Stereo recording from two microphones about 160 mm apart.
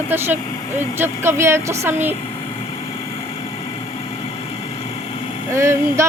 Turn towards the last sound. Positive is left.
turn(degrees=-15)  # may be behind; listen again after turning